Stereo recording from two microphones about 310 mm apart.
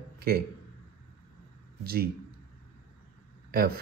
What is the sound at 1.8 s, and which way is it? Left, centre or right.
Speech, right.